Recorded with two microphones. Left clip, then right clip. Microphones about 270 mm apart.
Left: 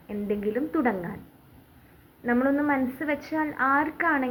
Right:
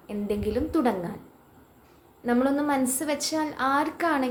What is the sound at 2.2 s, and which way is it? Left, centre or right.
A woman's voice, right.